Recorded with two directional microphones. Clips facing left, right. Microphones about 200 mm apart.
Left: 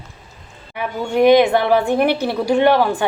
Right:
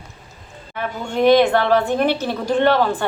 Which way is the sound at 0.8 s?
10° left (ahead or behind).